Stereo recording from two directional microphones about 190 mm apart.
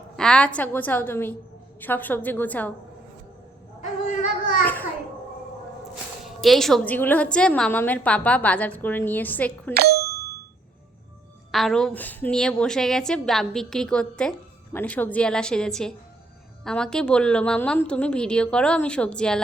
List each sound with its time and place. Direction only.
0.2 s a woman's voice: 5° left (ahead or behind)
4.6 s a woman's voice: 10° left (ahead or behind)
6.4 s a woman's voice: centre (ahead or behind)
9.7 s speech: 55° right (ahead or behind)
11.5 s a woman's voice: centre (ahead or behind)